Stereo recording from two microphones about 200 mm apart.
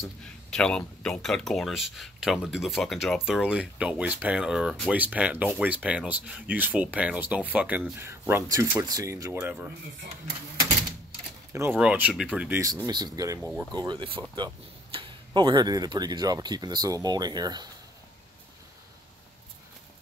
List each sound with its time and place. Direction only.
0.2 s speech: 5° left (ahead or behind)
11.5 s speech: 10° right (ahead or behind)